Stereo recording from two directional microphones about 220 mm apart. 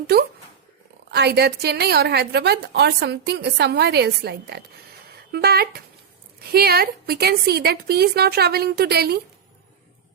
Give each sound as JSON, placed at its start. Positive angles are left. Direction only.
{"t": 0.1, "sound": "a woman's voice", "side_deg": -45}